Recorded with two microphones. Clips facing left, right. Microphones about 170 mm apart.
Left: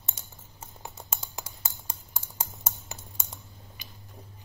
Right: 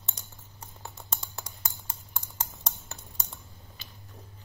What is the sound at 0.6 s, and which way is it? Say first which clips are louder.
Typing: left 2 dB; 10° left (ahead or behind).